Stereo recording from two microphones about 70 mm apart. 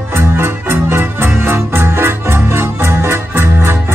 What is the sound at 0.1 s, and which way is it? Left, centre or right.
Music, right.